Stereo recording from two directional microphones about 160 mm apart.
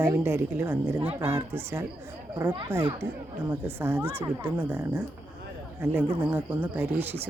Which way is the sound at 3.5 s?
15° right (ahead or behind).